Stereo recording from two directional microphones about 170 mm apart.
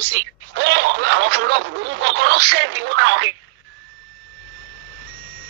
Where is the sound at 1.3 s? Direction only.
90° right.